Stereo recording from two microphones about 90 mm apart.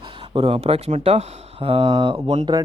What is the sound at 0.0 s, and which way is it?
Speech, 80° right.